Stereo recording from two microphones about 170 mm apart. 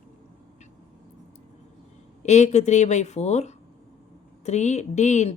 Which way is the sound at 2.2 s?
40° left (ahead or behind).